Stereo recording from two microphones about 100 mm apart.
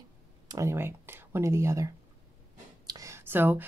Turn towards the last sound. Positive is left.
turn(degrees=-20)  # may be behind; listen again after turning